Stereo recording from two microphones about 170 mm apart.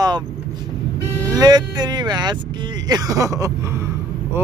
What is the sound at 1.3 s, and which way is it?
Vehicle, 25° right (ahead or behind).